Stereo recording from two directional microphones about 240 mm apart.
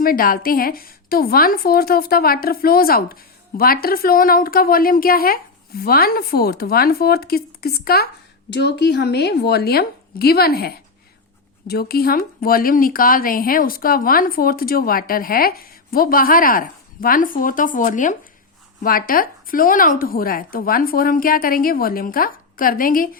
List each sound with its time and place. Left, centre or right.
0.0 s a woman's voice: left